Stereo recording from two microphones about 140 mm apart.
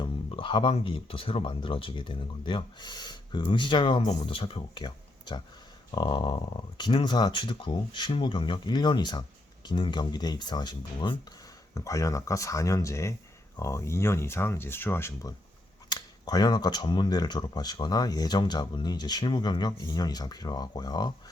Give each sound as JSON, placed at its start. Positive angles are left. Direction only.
{"t": 0.0, "sound": "speech", "side_deg": 40}
{"t": 11.7, "sound": "speech", "side_deg": 25}
{"t": 15.9, "sound": "speech", "side_deg": 30}